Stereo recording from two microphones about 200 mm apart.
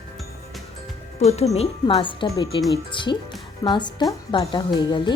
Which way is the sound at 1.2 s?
30° left (ahead or behind).